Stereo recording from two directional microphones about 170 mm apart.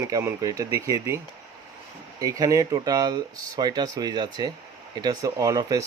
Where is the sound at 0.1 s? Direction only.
15° right (ahead or behind).